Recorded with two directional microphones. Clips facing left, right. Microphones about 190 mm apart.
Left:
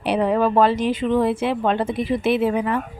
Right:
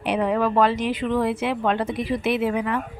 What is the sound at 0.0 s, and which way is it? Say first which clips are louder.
Speech: left 3 dB; 35° left (ahead or behind).